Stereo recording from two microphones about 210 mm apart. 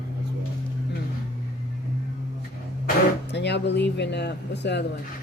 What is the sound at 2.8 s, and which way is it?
Speech, 55° left (ahead or behind).